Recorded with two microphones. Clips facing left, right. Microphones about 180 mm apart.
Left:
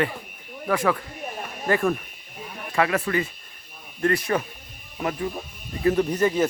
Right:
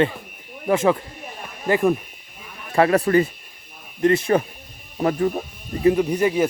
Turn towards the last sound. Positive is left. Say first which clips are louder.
# right 2 dB
turn(degrees=-10)  # may be behind; listen again after turning